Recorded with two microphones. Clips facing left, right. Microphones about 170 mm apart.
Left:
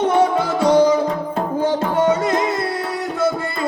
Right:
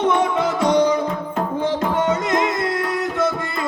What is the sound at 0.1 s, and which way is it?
Music, 30° left (ahead or behind).